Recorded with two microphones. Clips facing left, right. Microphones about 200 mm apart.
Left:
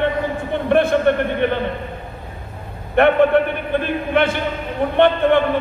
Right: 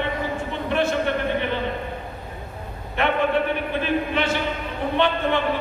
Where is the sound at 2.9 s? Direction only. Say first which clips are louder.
Left 8 dB; 55° left (ahead or behind).